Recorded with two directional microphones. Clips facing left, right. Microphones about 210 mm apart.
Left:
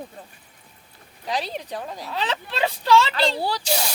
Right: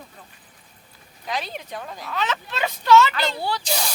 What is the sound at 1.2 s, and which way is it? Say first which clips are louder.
Speech: left 2 dB; 35° left (ahead or behind).